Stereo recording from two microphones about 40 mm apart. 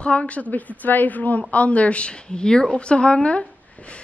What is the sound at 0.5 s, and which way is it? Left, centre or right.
A woman's voice, left.